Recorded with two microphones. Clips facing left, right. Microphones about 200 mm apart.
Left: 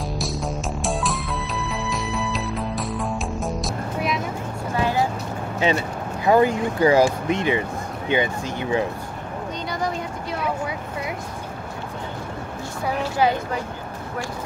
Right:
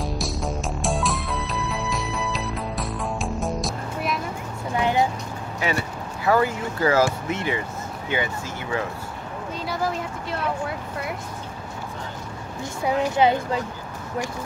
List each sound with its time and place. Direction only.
0.0 s music: centre (ahead or behind)
4.7 s vehicle: 20° right (ahead or behind)
5.6 s speech: 20° left (ahead or behind)
9.7 s vehicle: 5° right (ahead or behind)
12.8 s a woman's voice: 20° right (ahead or behind)